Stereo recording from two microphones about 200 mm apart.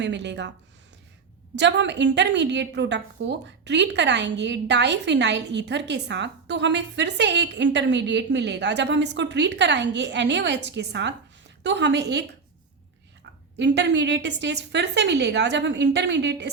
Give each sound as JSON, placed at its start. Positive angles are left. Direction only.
{"t": 0.0, "sound": "a woman's voice", "side_deg": -60}
{"t": 1.5, "sound": "a woman's voice", "side_deg": -60}
{"t": 13.6, "sound": "a woman's voice", "side_deg": -60}